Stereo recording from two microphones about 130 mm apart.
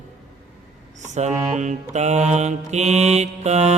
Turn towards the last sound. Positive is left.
turn(degrees=-60)  # may be behind; listen again after turning